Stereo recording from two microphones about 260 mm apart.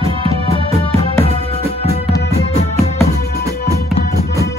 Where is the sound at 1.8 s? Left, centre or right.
Left.